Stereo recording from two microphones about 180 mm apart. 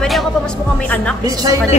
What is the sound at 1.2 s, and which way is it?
Speech, 20° right (ahead or behind).